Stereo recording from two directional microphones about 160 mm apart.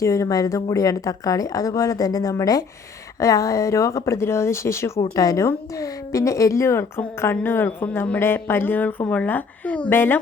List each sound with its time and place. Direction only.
0.0 s a woman's voice: 20° left (ahead or behind)